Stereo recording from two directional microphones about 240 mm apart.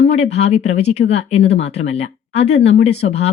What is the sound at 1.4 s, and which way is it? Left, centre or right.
Speech, left.